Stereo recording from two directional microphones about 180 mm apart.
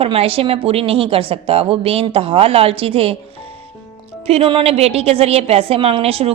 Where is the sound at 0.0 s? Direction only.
30° right (ahead or behind).